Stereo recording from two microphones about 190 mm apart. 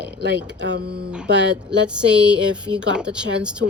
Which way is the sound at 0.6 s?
60° right (ahead or behind).